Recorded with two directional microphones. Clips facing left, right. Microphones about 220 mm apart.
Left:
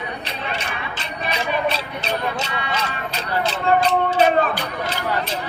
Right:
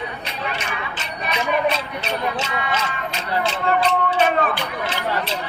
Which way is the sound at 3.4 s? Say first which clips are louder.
Left 2 dB; 40° left (ahead or behind).